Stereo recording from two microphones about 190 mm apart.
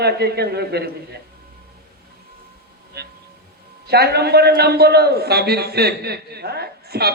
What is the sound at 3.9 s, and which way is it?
A man's voice, 55° right (ahead or behind).